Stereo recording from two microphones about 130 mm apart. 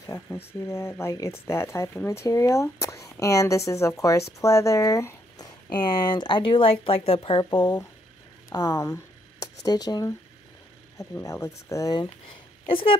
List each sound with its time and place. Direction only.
0.0 s speech: 20° left (ahead or behind); by 7.4 s 45° left (ahead or behind)
8.5 s speech: 25° left (ahead or behind)
11.1 s speech: 20° left (ahead or behind)
12.6 s speech: 45° left (ahead or behind)